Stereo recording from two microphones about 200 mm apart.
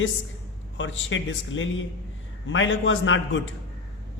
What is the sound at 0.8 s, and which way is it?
A man's voice, 70° left (ahead or behind).